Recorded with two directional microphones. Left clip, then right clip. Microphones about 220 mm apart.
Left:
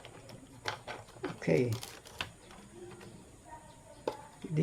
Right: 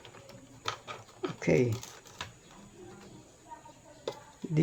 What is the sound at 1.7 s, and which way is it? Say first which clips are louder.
Typing: right 2 dB; 15° left (ahead or behind).